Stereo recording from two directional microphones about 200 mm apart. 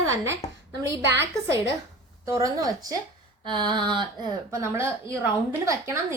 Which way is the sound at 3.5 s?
25° right (ahead or behind).